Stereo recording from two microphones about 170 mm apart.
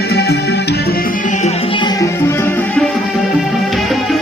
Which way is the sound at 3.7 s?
Centre (ahead or behind).